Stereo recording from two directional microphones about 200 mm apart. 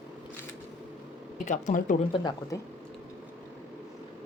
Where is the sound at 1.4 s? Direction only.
40° left (ahead or behind).